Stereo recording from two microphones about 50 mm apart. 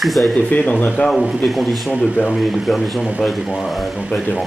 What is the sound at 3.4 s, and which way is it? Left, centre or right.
Speech, centre.